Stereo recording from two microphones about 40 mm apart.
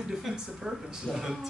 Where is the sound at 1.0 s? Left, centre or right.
Centre.